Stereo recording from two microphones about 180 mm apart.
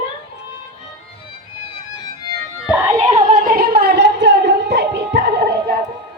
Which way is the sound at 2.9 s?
35° right (ahead or behind).